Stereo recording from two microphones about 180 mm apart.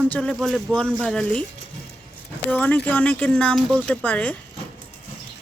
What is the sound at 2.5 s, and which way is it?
Speech, 10° left (ahead or behind).